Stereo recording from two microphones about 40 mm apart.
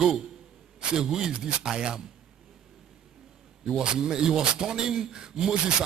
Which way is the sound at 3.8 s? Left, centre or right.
Right.